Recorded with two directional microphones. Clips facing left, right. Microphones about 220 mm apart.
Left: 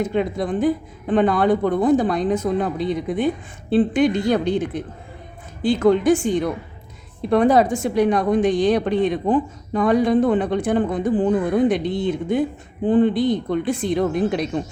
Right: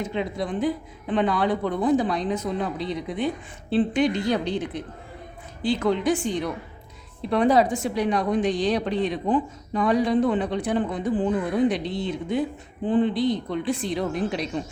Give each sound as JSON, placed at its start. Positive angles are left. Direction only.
{"t": 0.0, "sound": "a woman's voice", "side_deg": 50}